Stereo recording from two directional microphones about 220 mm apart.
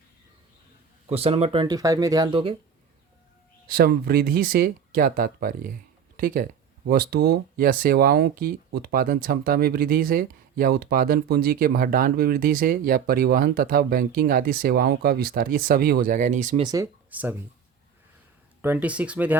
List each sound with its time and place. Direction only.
1.0 s speech: 25° right (ahead or behind)
3.7 s speech: 40° right (ahead or behind)
16.6 s speech: 15° right (ahead or behind)
18.6 s speech: 5° right (ahead or behind)